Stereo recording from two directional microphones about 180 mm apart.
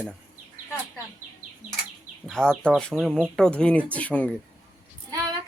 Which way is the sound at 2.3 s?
5° left (ahead or behind).